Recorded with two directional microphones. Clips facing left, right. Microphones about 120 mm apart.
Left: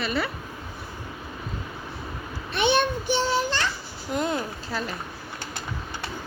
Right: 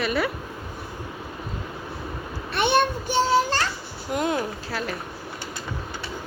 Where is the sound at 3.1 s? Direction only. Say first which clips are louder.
Right 4 dB; 40° right (ahead or behind).